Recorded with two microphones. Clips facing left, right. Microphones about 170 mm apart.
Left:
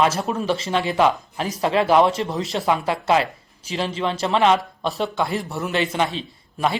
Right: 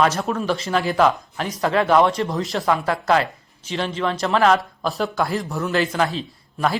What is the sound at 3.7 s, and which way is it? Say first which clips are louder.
Speech: right 1 dB; 30° left (ahead or behind).